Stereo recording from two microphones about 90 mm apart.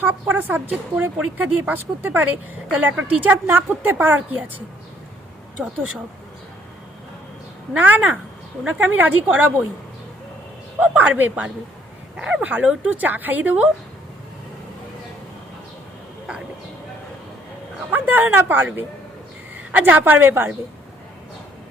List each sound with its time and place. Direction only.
0.0 s a woman's voice: 20° right (ahead or behind)
7.7 s a woman's voice: 20° right (ahead or behind)
10.8 s a woman's voice: 15° right (ahead or behind)
17.9 s speech: 20° right (ahead or behind)